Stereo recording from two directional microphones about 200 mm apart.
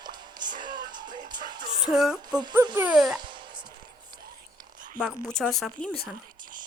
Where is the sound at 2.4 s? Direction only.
20° right (ahead or behind).